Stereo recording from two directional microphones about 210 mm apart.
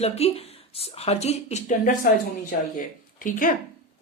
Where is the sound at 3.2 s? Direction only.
40° left (ahead or behind).